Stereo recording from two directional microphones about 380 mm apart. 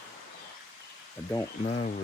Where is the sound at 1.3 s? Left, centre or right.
Centre.